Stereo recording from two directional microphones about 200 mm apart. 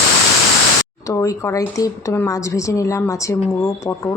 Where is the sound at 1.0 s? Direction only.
15° left (ahead or behind).